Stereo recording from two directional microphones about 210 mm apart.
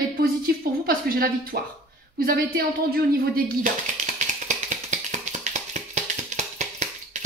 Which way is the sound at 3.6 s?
35° right (ahead or behind).